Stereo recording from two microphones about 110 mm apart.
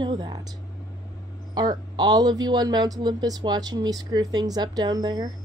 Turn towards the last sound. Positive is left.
turn(degrees=-35)  # may be behind; listen again after turning